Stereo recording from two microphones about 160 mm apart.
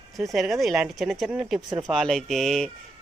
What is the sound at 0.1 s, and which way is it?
Speech, centre (ahead or behind).